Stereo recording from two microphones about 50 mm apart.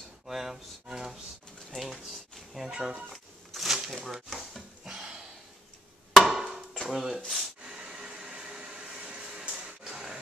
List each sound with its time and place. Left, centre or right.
0.3 s speech: centre
1.7 s fowl: centre
3.1 s a sound: centre
6.1 s chop: centre
6.5 s dishes: centre
7.6 s a sound: right